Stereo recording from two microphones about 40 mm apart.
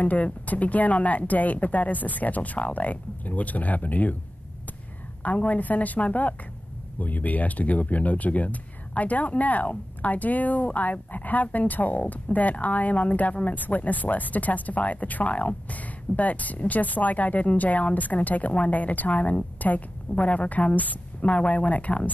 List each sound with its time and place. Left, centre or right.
0.0 s speech: left
5.2 s a woman's voice: left